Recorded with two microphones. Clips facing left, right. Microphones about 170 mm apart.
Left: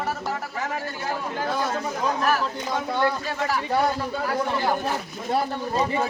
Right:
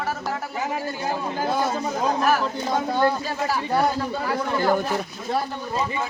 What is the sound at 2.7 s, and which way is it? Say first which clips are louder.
Speech: right 3 dB; 30° right (ahead or behind).